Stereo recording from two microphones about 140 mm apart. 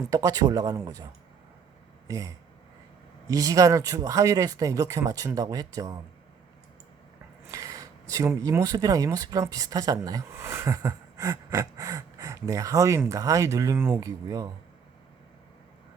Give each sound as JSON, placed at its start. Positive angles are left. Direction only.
{"t": 0.1, "sound": "speech", "side_deg": -25}
{"t": 2.0, "sound": "speech", "side_deg": -25}
{"t": 7.4, "sound": "a sound", "side_deg": -25}
{"t": 8.4, "sound": "speech", "side_deg": -25}
{"t": 14.3, "sound": "speech", "side_deg": -25}